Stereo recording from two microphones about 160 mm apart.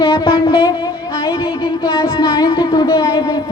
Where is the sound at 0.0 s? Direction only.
30° left (ahead or behind).